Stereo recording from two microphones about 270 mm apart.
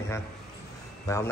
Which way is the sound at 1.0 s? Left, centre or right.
Centre.